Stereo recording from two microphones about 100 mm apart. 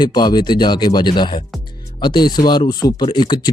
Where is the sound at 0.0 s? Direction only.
45° left (ahead or behind).